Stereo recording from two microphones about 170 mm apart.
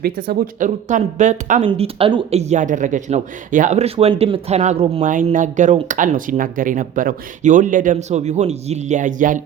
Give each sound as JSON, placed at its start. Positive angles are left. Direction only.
{"t": 0.0, "sound": "speech", "side_deg": -65}
{"t": 0.9, "sound": "speech", "side_deg": -45}
{"t": 1.6, "sound": "speech", "side_deg": -30}